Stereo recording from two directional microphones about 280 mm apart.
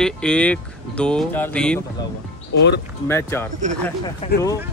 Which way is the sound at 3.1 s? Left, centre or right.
Centre.